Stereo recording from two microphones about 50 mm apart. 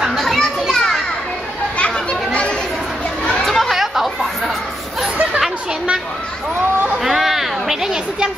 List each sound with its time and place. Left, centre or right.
0.0 s children playing: centre
0.4 s children playing: centre
1.8 s children playing: left
3.4 s chatter: centre
3.7 s chatter: centre
7.0 s a sound: centre